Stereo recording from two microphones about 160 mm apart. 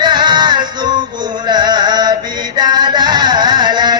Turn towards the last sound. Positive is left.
turn(degrees=-25)  # may be behind; listen again after turning